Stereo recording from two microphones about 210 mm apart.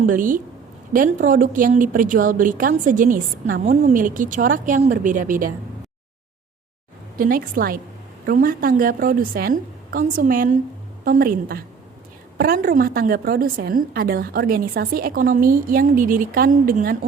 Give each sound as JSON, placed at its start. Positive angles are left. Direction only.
{"t": 0.0, "sound": "a woman's voice", "side_deg": -40}
{"t": 7.2, "sound": "a woman's voice", "side_deg": -40}